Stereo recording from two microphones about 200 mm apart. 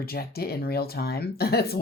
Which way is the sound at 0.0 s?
50° left (ahead or behind).